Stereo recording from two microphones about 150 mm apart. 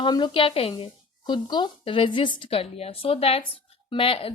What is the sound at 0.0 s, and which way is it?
A woman's voice, 30° left (ahead or behind).